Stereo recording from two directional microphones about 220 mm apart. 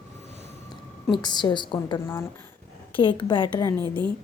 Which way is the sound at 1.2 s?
20° left (ahead or behind).